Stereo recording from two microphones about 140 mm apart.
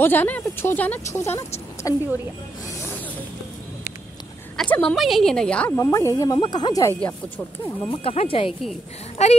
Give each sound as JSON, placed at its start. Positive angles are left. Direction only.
{"t": 0.0, "sound": "speech", "side_deg": 15}
{"t": 4.6, "sound": "a woman's voice", "side_deg": 10}
{"t": 5.7, "sound": "speech", "side_deg": 20}
{"t": 7.9, "sound": "speech", "side_deg": 45}
{"t": 9.2, "sound": "a sound", "side_deg": 50}